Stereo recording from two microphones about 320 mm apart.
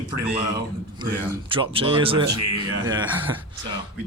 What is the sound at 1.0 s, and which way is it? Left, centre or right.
A man's voice, centre.